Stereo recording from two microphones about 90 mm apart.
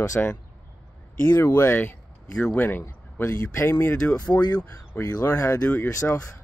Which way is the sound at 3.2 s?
35° left (ahead or behind).